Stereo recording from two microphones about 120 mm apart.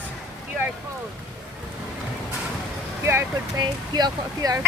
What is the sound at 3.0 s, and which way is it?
Speech, 20° right (ahead or behind).